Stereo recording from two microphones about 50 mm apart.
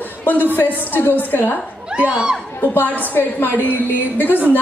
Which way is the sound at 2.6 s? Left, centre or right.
Left.